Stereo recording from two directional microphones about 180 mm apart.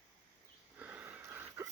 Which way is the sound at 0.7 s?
10° right (ahead or behind).